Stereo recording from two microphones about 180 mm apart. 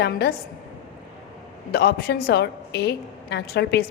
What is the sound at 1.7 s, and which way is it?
A woman's voice, 60° left (ahead or behind).